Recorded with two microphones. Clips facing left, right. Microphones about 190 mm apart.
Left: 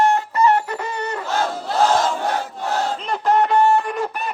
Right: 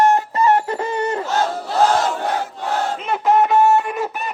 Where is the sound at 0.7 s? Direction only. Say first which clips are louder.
Right 5 dB; 25° right (ahead or behind).